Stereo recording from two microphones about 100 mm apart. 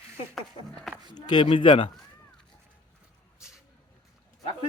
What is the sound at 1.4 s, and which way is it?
Speech, 55° left (ahead or behind).